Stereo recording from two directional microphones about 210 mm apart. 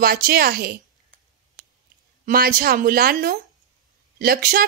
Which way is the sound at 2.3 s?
45° right (ahead or behind).